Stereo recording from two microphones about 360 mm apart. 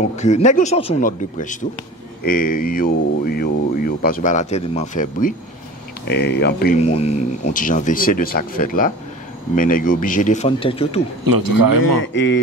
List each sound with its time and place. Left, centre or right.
0.1 s speech: centre
11.2 s speech: right
12.0 s speech: left